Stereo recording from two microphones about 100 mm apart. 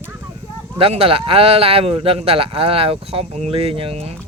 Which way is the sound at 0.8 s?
70° right (ahead or behind).